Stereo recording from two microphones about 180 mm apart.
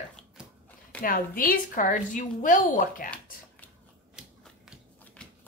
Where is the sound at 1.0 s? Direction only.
50° left (ahead or behind).